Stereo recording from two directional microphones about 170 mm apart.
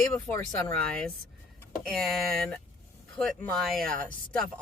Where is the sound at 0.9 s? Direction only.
5° left (ahead or behind).